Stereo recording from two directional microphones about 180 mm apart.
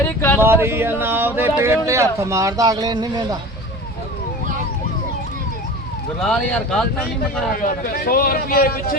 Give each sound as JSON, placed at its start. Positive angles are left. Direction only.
{"t": 0.0, "sound": "speech", "side_deg": 15}
{"t": 0.3, "sound": "speech", "side_deg": -10}
{"t": 6.1, "sound": "speech", "side_deg": 5}
{"t": 7.5, "sound": "a man's voice", "side_deg": 50}